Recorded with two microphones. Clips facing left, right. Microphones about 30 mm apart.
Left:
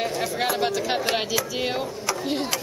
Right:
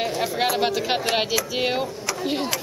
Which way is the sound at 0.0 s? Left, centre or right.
Centre.